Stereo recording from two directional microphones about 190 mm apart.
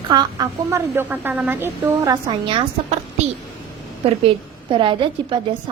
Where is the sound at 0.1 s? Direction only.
20° right (ahead or behind).